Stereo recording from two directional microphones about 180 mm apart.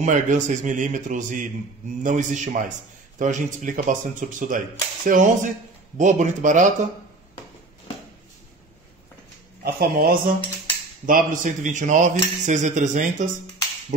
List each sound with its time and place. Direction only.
0.0 s speech: 45° right (ahead or behind)
9.6 s speech: 55° right (ahead or behind)